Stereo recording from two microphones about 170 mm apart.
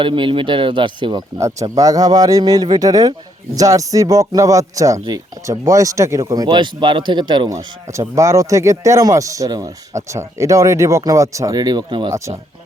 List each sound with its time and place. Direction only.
0.0 s speech: 30° right (ahead or behind)
1.4 s speech: 20° right (ahead or behind)